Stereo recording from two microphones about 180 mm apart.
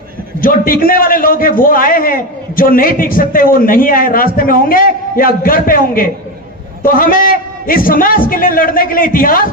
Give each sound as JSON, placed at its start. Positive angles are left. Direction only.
{"t": 0.4, "sound": "a man's voice", "side_deg": 50}